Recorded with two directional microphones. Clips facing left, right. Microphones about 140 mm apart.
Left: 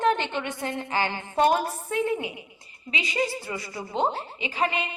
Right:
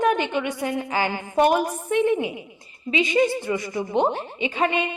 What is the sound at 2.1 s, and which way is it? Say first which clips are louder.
Speech: right 6 dB; 25° right (ahead or behind).